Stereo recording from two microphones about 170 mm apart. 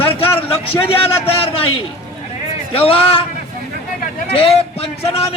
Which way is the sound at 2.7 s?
35° left (ahead or behind).